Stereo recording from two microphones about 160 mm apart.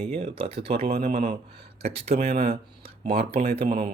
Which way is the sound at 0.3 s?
35° right (ahead or behind).